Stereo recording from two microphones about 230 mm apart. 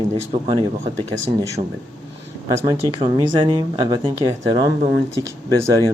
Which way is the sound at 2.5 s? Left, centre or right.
Centre.